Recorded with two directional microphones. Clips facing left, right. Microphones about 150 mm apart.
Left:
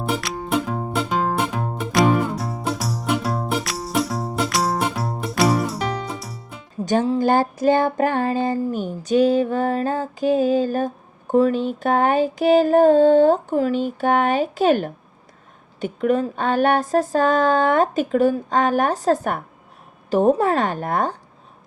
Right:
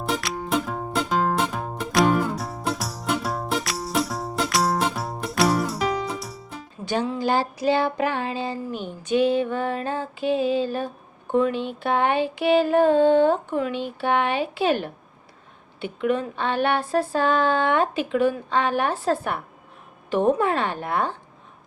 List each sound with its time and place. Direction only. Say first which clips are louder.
0.1 s music: left 2 dB; centre (ahead or behind)
6.8 s female singing: left 6 dB; 45° left (ahead or behind)
15.8 s speech: left 4 dB; 40° left (ahead or behind)
20.1 s female singing: left 4 dB; 40° left (ahead or behind)